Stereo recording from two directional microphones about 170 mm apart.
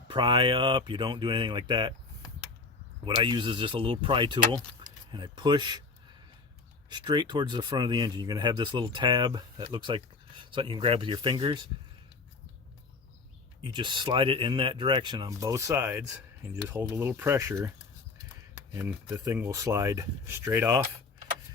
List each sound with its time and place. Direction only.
0.1 s speech: 30° right (ahead or behind)
3.0 s speech: 30° right (ahead or behind)
6.9 s speech: 25° right (ahead or behind)
13.6 s speech: 25° right (ahead or behind)
18.7 s speech: 15° right (ahead or behind)